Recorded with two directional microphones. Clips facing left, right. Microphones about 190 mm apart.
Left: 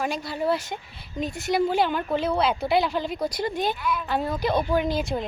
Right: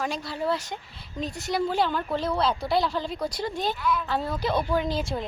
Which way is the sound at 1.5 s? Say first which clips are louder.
Left 3 dB; 20° left (ahead or behind).